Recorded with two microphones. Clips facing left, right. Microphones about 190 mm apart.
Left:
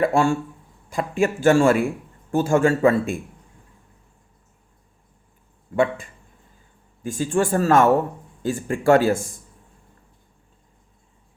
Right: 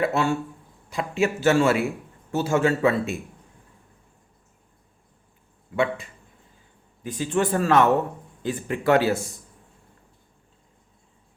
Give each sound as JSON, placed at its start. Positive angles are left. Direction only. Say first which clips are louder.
{"t": 0.0, "sound": "speech", "louder": "left 4 dB", "side_deg": 45}
{"t": 5.7, "sound": "speech", "louder": "left 3 dB", "side_deg": 50}